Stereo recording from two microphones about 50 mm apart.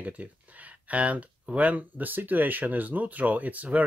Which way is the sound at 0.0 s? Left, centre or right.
Right.